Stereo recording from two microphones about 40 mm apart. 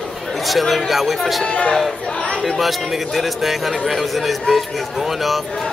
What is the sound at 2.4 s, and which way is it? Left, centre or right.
Speech, centre.